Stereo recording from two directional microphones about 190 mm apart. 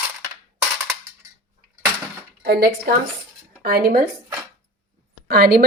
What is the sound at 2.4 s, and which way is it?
Speech, 55° right (ahead or behind).